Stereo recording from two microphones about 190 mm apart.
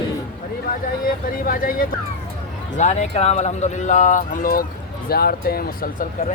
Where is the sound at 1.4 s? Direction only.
45° left (ahead or behind).